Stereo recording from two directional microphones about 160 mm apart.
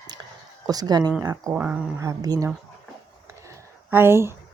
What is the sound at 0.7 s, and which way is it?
Speech, 25° right (ahead or behind).